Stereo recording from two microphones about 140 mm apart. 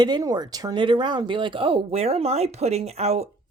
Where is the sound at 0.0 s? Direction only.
30° right (ahead or behind).